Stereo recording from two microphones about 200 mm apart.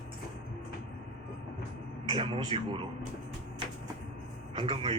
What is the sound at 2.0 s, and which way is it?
Speech, 25° right (ahead or behind).